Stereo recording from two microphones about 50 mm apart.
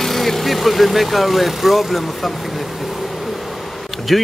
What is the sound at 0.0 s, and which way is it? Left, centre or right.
Speech, centre.